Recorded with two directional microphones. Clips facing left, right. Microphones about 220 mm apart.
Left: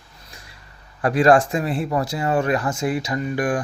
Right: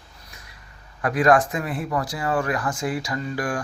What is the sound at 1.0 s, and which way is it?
Speech, 30° left (ahead or behind).